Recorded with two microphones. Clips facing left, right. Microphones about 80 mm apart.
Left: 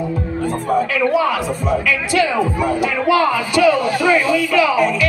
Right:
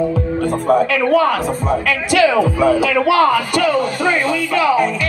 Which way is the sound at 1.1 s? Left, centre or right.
Right.